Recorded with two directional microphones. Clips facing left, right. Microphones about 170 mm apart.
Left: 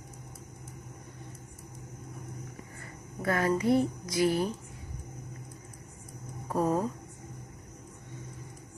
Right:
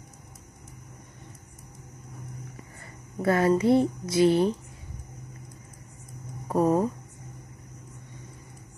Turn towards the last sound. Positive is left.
turn(degrees=-25)  # may be behind; listen again after turning